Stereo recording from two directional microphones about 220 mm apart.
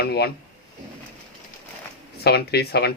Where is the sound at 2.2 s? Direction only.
45° left (ahead or behind).